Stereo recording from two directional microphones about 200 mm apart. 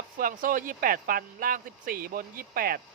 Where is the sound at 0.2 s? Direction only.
45° right (ahead or behind).